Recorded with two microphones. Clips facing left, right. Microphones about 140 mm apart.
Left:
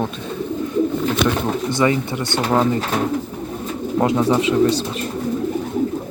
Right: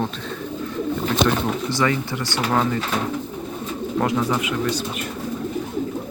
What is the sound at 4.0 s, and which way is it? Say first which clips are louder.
Speech: left 6 dB; 25° left (ahead or behind).